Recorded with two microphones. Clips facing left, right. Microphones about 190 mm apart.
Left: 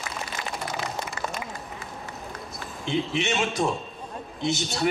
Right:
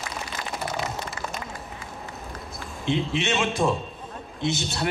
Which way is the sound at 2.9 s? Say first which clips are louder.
Right 1 dB; centre (ahead or behind).